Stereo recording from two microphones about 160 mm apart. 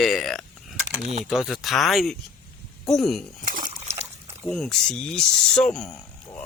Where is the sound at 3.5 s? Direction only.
45° right (ahead or behind).